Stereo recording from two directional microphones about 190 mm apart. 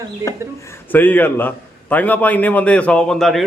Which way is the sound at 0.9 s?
10° left (ahead or behind).